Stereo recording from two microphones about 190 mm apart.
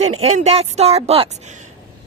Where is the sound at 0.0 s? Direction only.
35° right (ahead or behind).